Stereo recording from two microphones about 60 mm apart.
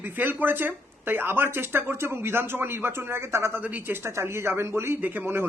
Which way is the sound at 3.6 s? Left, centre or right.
Right.